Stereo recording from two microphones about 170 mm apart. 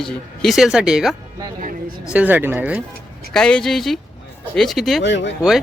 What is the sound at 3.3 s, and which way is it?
Speech, 5° left (ahead or behind).